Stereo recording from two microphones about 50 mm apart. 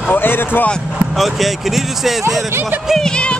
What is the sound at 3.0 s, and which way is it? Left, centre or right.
Speech, centre.